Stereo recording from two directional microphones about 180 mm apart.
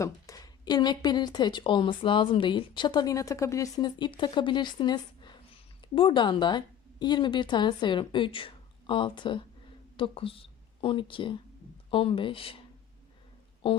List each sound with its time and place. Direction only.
0.0 s speech: 20° left (ahead or behind)